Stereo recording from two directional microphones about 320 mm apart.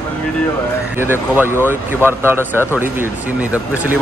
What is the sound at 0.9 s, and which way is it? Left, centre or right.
Speech, centre.